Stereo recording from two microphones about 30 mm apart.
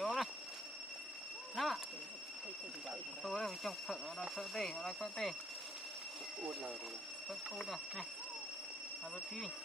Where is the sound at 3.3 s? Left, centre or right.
Centre.